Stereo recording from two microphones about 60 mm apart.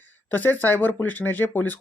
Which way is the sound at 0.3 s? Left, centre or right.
Left.